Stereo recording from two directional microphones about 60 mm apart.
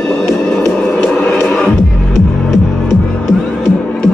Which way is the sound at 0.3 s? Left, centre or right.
Centre.